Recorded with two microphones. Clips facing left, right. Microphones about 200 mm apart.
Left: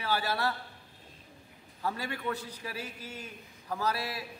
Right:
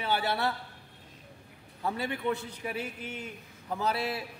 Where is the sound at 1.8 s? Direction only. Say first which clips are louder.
Right 3 dB; 20° right (ahead or behind).